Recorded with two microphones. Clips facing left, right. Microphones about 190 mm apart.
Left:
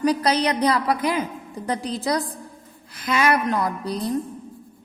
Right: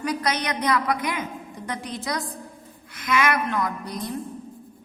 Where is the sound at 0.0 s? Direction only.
30° left (ahead or behind).